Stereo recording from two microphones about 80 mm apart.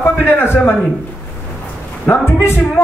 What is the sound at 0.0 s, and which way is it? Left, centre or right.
Speech, left.